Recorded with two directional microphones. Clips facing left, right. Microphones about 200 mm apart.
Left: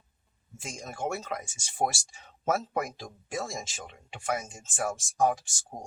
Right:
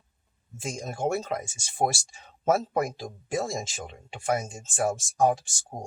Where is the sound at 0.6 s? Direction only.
30° right (ahead or behind).